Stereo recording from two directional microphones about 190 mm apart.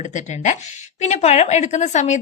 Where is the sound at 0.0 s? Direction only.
40° left (ahead or behind).